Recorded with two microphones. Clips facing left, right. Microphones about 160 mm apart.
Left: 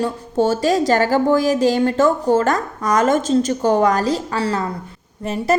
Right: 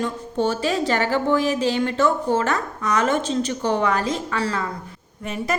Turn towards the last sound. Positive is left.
turn(degrees=35)  # may be behind; listen again after turning